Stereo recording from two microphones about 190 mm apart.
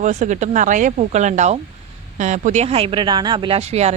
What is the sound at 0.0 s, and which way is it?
Speech, 40° right (ahead or behind).